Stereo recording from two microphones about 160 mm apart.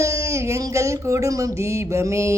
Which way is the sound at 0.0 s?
20° right (ahead or behind).